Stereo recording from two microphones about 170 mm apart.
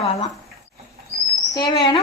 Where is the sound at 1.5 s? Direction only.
25° left (ahead or behind).